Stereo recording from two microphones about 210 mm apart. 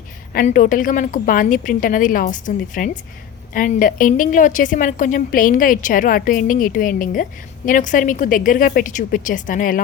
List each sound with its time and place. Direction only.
0.3 s a woman's voice: 40° left (ahead or behind)